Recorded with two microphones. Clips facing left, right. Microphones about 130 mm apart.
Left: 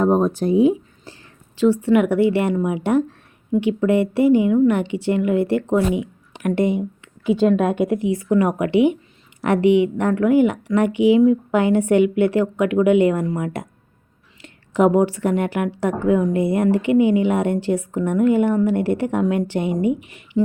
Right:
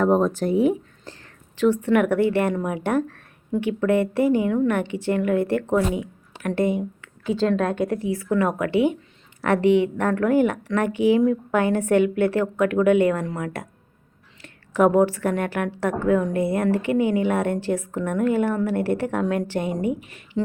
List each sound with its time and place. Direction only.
0.0 s speech: 15° left (ahead or behind)
19.7 s speech: 45° right (ahead or behind)
20.1 s speech: 15° left (ahead or behind)